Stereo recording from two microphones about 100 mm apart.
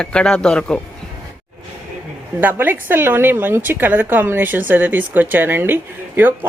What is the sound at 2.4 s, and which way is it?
A woman's voice, 20° right (ahead or behind).